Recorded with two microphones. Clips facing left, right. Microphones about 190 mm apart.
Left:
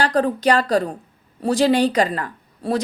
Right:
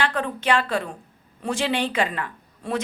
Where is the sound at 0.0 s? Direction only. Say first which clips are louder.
Left 7 dB; 35° left (ahead or behind).